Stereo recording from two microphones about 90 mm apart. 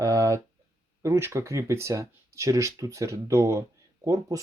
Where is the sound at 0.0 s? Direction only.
40° right (ahead or behind).